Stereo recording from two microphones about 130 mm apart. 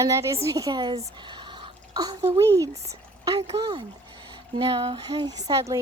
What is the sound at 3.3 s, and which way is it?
Speech, 40° right (ahead or behind).